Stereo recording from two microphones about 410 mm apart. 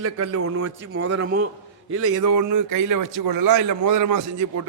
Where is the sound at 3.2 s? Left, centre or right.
Right.